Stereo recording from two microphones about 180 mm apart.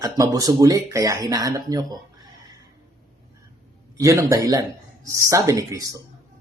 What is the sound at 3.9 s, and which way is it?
Speech, 20° right (ahead or behind).